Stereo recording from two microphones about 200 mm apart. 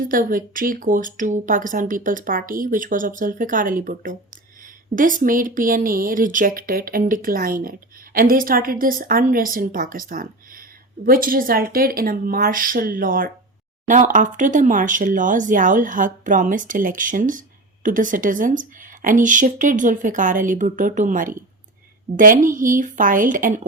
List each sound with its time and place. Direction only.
0.0 s speech: 45° right (ahead or behind)